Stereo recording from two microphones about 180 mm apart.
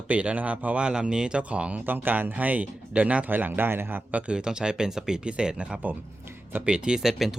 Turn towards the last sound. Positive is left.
turn(degrees=0)  # may be behind; listen again after turning